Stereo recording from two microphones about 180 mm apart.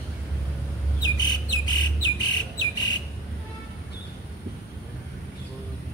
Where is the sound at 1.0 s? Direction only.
25° left (ahead or behind).